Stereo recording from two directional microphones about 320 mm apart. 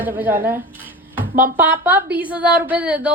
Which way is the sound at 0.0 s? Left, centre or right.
Centre.